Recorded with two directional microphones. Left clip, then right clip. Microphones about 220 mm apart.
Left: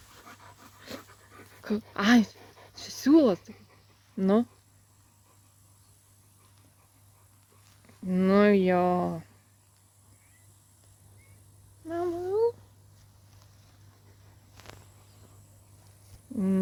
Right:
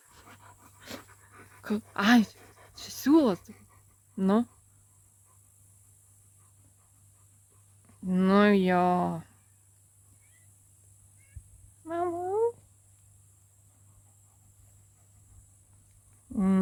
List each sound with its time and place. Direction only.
0.8 s dog: 25° right (ahead or behind)
1.6 s speech: 25° right (ahead or behind)
2.3 s pant: centre (ahead or behind)
2.7 s a sound: 25° right (ahead or behind)
4.2 s speech: 25° right (ahead or behind)
8.0 s speech: 30° right (ahead or behind)
11.9 s humming: 40° right (ahead or behind)